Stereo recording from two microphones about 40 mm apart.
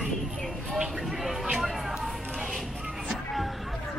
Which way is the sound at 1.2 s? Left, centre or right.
Centre.